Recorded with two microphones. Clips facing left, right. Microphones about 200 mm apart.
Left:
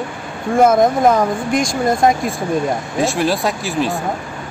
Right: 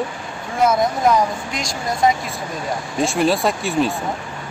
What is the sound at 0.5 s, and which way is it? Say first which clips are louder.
Speech: left 6 dB; 50° left (ahead or behind).